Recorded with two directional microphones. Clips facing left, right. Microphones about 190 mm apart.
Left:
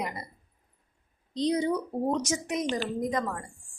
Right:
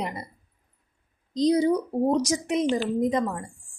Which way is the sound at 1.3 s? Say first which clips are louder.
Right 6 dB; 35° right (ahead or behind).